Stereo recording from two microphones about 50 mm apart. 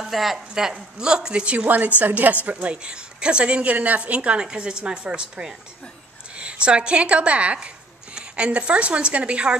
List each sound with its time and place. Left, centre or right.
0.0 s a woman's voice: centre; by 1.7 s right
2.0 s a woman's voice: right
2.4 s a woman's voice: right